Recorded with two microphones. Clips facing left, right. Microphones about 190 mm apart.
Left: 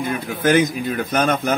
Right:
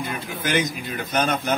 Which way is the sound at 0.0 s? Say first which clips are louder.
Left 8 dB; 50° left (ahead or behind).